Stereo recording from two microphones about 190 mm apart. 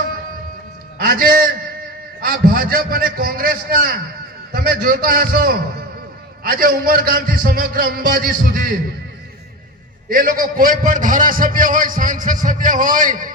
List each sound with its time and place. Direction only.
0.9 s a sound: 50° right (ahead or behind)
2.2 s a man's voice: 50° right (ahead or behind)
10.1 s a man's voice: 50° right (ahead or behind)